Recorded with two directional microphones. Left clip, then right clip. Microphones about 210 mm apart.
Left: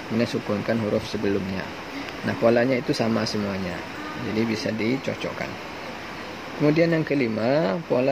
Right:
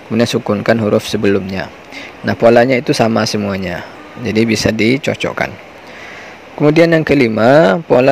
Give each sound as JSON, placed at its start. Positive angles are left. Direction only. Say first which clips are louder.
{"t": 0.2, "sound": "speech", "louder": "right 12 dB", "side_deg": -50}
{"t": 6.6, "sound": "speech", "louder": "right 11 dB", "side_deg": -45}